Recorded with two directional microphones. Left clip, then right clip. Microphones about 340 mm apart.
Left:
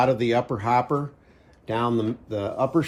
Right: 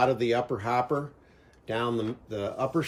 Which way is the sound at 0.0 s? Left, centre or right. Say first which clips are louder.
Left 3 dB; centre.